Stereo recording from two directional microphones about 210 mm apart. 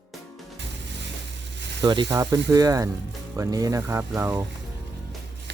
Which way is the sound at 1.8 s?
20° right (ahead or behind).